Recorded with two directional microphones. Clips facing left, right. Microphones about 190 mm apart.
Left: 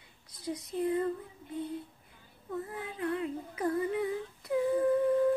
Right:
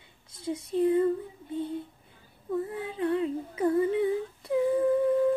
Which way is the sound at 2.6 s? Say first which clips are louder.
Right 5 dB; 30° right (ahead or behind).